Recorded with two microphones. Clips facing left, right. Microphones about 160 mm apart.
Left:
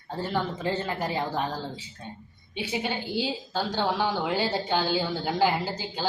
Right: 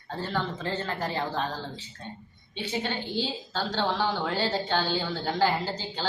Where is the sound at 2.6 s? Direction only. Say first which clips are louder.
Left 1 dB; 10° left (ahead or behind).